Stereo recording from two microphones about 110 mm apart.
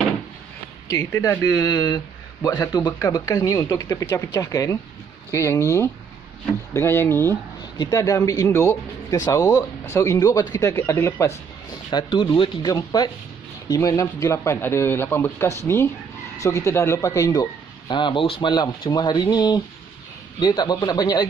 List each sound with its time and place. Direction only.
0.8 s a man's voice: 30° left (ahead or behind)
7.7 s a man's voice: 35° left (ahead or behind)
11.9 s a man's voice: 40° left (ahead or behind)
17.4 s speech: 45° left (ahead or behind)